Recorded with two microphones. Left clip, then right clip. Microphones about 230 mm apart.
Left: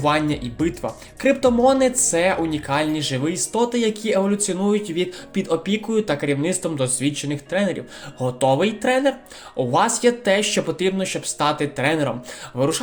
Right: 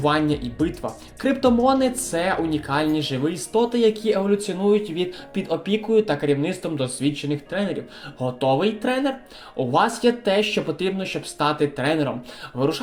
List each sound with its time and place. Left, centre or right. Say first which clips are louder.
0.0 s speech: left 1 dB; left